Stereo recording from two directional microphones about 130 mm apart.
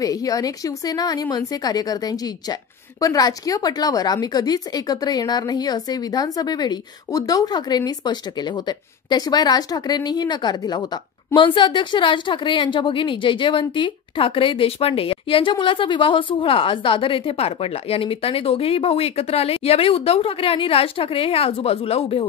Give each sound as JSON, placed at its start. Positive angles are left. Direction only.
{"t": 0.0, "sound": "a woman's voice", "side_deg": 25}